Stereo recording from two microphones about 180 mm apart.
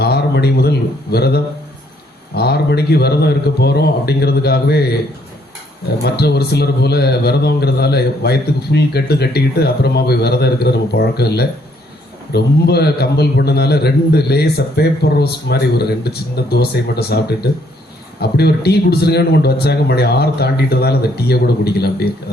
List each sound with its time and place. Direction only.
0.0 s a man's voice: 65° left (ahead or behind)
6.0 s a man's voice: 65° left (ahead or behind)